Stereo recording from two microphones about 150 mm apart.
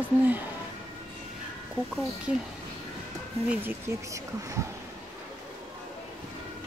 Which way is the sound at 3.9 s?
20° right (ahead or behind).